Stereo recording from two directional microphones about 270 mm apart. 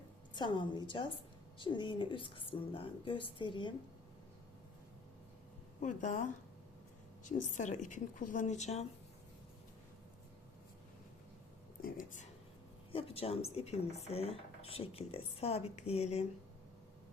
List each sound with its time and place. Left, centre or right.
0.3 s a woman's voice: centre
5.8 s speech: left
11.8 s a sound: left
12.9 s speech: left